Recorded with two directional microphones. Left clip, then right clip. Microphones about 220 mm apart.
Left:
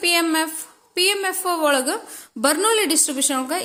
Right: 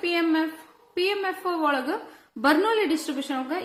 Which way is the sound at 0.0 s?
50° left (ahead or behind).